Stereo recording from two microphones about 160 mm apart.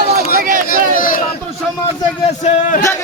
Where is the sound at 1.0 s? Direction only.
60° left (ahead or behind).